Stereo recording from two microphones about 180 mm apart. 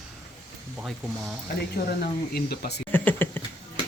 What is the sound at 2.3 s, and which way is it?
Speech, 60° left (ahead or behind).